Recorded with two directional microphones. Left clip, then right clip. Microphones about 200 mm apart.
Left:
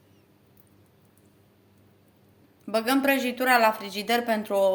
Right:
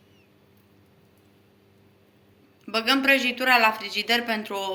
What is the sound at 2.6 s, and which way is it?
A woman's voice, 50° left (ahead or behind).